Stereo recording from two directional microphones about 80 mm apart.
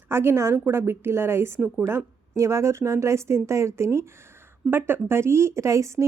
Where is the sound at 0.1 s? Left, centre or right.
Right.